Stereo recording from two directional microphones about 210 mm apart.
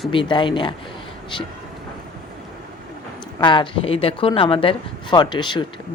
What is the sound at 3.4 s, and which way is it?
Speech, 20° left (ahead or behind).